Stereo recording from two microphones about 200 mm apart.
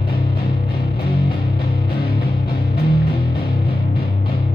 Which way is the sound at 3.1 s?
50° left (ahead or behind).